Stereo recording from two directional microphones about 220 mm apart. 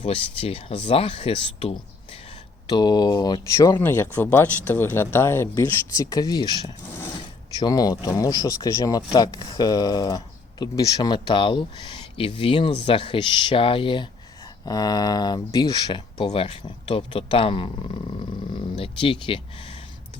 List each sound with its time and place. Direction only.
0.0 s speech: 25° left (ahead or behind)